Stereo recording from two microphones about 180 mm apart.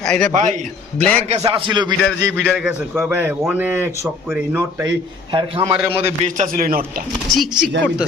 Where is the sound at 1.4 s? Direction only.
25° right (ahead or behind).